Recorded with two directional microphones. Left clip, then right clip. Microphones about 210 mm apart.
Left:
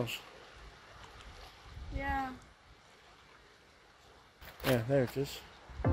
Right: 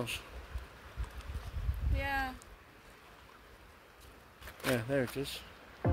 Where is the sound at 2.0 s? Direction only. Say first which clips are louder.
Right 1 dB; 35° right (ahead or behind).